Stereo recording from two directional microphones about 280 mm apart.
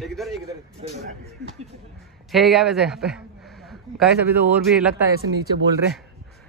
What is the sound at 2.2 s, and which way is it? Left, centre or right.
Speech, centre.